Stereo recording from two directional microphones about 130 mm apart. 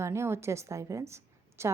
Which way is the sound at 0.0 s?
20° right (ahead or behind).